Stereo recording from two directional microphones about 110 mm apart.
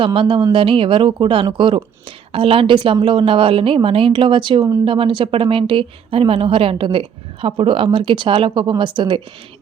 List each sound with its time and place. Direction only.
0.0 s speech: 55° right (ahead or behind)